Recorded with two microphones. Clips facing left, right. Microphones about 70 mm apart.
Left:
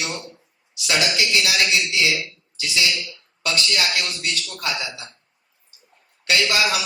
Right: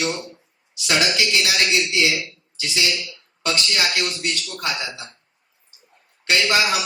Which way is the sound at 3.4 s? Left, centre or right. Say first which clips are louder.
Right 1 dB; right.